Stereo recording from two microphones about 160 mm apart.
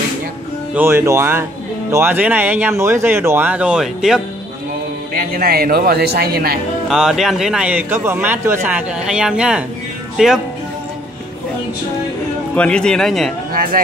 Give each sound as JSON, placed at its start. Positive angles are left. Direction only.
{"t": 0.7, "sound": "speech", "side_deg": -15}
{"t": 5.1, "sound": "a man's voice", "side_deg": -65}
{"t": 6.9, "sound": "a man's voice", "side_deg": -5}
{"t": 12.5, "sound": "a man's voice", "side_deg": 5}
{"t": 13.5, "sound": "a sound", "side_deg": -65}